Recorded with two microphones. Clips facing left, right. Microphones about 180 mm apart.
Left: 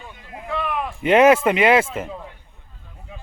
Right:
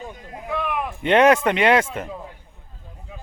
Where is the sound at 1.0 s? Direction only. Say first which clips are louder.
Left 2 dB; 5° left (ahead or behind).